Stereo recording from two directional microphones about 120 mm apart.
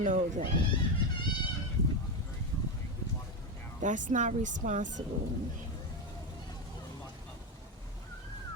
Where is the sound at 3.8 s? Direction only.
90° right.